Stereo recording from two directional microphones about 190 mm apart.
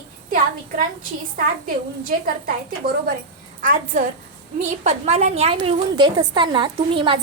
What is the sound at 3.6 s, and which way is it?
A woman's voice, 40° right (ahead or behind).